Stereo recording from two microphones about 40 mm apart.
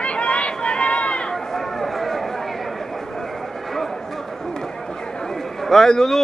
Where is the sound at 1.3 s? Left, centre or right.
Centre.